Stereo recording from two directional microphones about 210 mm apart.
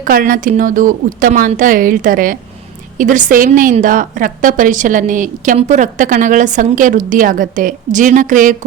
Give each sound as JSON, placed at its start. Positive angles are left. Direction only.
{"t": 0.0, "sound": "a woman's voice", "side_deg": -40}